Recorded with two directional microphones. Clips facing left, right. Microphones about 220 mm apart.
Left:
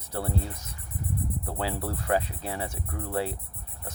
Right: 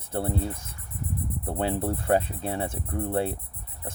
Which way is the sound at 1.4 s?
25° right (ahead or behind).